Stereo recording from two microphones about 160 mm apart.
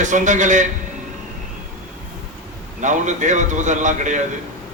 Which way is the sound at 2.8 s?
50° right (ahead or behind).